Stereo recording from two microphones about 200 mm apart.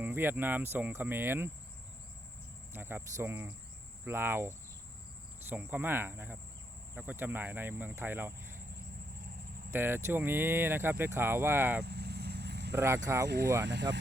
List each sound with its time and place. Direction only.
0.0 s speech: 10° right (ahead or behind)
2.7 s speech: 10° right (ahead or behind)
9.7 s speech: 10° right (ahead or behind)
11.8 s vehicle: 55° right (ahead or behind)
12.7 s speech: 15° right (ahead or behind)
13.2 s speech: 55° right (ahead or behind)